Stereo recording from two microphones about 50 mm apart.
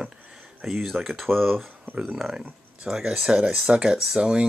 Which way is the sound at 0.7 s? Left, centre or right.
Centre.